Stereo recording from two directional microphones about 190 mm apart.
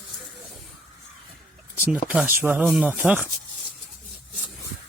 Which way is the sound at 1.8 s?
5° right (ahead or behind).